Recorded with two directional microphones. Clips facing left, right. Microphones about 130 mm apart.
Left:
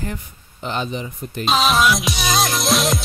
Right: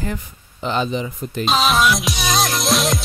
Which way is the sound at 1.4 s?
Centre (ahead or behind).